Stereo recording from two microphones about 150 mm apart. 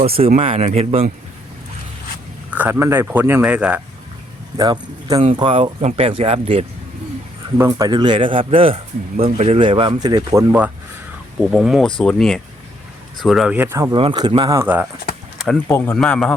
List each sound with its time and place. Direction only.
0.0 s speech: 40° right (ahead or behind)
2.5 s speech: 10° right (ahead or behind)
4.5 s speech: 25° right (ahead or behind)
5.2 s speech: 35° right (ahead or behind)
7.7 s speech: 30° right (ahead or behind)
11.3 s speech: 5° right (ahead or behind)
13.9 s speech: 35° right (ahead or behind)
14.6 s speech: 15° right (ahead or behind)
15.6 s speech: 15° left (ahead or behind)